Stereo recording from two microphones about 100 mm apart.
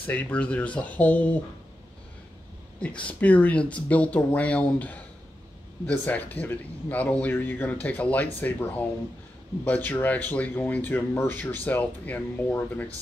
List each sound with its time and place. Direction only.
0.0 s speech: 15° left (ahead or behind)
2.8 s speech: 10° left (ahead or behind)